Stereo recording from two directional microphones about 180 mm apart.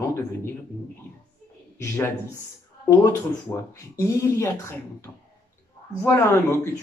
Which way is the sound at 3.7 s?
15° left (ahead or behind).